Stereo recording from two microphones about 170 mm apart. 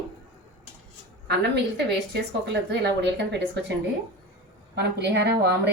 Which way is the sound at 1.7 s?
80° right.